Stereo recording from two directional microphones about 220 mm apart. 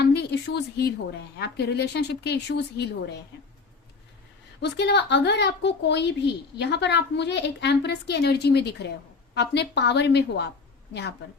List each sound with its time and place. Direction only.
0.0 s a sound: 50° left (ahead or behind)
1.4 s a woman's voice: 50° left (ahead or behind)
4.6 s a woman's voice: 50° left (ahead or behind)